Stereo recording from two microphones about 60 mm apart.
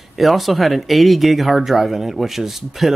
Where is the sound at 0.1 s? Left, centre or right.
Centre.